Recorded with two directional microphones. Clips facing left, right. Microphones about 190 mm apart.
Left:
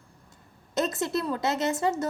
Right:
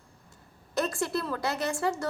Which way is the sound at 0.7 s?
20° left (ahead or behind).